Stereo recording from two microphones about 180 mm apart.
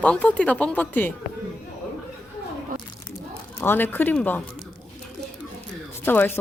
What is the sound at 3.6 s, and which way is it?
Speech, 10° left (ahead or behind).